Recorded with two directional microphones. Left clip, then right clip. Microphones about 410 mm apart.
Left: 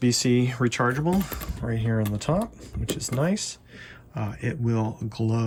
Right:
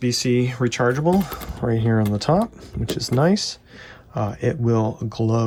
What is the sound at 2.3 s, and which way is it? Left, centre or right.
Speech, left.